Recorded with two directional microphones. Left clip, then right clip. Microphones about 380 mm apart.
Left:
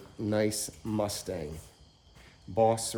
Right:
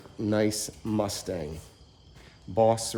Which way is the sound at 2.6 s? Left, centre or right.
Centre.